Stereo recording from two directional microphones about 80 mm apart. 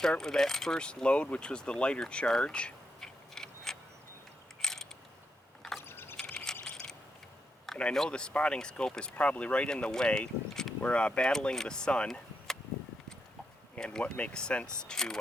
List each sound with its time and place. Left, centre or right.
0.0 s speech: centre
4.6 s a sound: centre
5.8 s ratchet: left
6.1 s coin: centre
7.7 s speech: centre
13.7 s speech: centre